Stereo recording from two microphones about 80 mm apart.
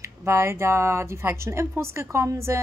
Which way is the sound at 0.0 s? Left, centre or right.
Right.